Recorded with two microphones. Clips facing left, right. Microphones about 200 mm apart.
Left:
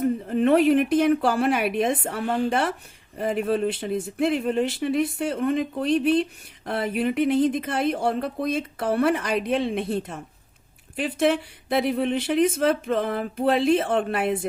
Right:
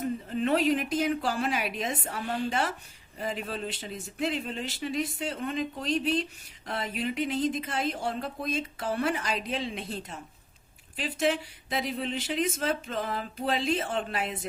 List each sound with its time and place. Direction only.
0.0 s speech: 55° left (ahead or behind)